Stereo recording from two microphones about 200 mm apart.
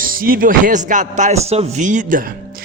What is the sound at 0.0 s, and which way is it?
Speech, 45° right (ahead or behind).